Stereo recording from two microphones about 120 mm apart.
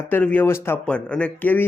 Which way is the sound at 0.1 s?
15° left (ahead or behind).